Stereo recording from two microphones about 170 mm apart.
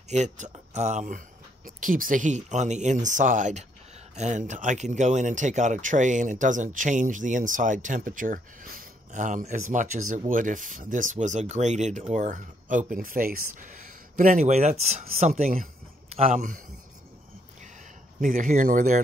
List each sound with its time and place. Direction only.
0.1 s speech: 45° right (ahead or behind)
18.2 s speech: 50° right (ahead or behind)